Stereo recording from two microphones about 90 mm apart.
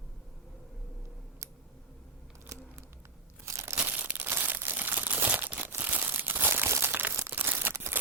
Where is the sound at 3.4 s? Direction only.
35° right (ahead or behind).